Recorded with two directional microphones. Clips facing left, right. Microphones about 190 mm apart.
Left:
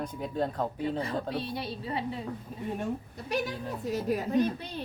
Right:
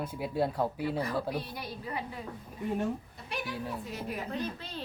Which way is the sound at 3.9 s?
40° left (ahead or behind).